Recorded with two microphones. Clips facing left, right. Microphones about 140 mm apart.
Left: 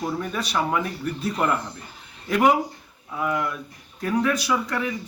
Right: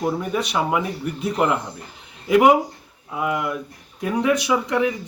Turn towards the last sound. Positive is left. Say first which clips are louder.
# right 5 dB
turn(degrees=-20)  # may be behind; listen again after turning